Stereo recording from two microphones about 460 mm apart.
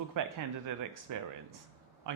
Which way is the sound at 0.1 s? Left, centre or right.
Right.